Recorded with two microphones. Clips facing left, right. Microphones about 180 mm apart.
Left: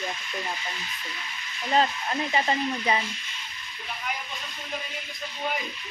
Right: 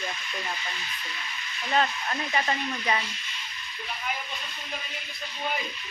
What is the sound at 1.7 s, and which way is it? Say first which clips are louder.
Speech: left 2 dB; 25° left (ahead or behind).